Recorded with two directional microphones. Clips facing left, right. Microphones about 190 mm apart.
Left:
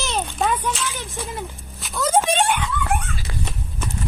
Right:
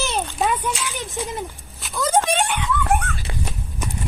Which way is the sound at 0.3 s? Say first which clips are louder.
Left 1 dB; 10° right (ahead or behind).